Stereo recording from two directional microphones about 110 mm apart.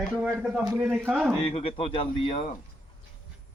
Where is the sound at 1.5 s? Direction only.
55° left (ahead or behind).